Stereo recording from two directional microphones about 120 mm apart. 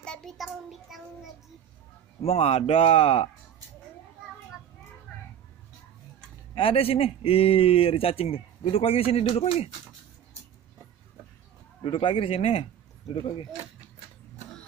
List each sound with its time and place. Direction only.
0.0 s child singing: 5° left (ahead or behind)
2.2 s speech: 55° left (ahead or behind)
6.5 s speech: 50° left (ahead or behind)
11.8 s speech: 45° left (ahead or behind)